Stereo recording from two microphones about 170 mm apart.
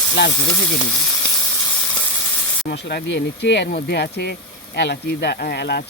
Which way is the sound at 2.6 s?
80° left.